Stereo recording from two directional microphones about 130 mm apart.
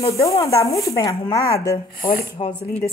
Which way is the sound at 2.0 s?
45° left (ahead or behind).